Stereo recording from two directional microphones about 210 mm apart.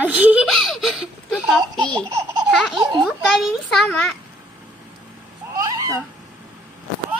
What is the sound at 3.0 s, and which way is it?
A child's voice, centre (ahead or behind).